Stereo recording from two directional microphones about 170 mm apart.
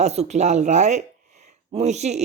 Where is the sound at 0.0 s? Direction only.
40° right (ahead or behind).